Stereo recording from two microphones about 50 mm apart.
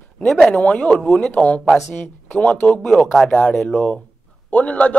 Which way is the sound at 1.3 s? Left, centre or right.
Left.